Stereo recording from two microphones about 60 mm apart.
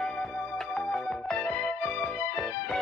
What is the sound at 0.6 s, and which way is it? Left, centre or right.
Music, centre.